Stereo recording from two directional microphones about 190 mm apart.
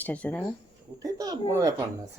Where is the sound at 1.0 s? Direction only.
20° right (ahead or behind).